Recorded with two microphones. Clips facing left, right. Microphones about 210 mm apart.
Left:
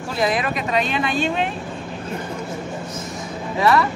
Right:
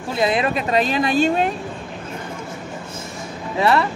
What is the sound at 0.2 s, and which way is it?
Speech, 25° right (ahead or behind).